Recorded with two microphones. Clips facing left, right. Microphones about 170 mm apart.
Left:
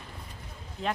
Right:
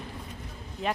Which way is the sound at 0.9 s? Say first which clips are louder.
Right 1 dB; 5° right (ahead or behind).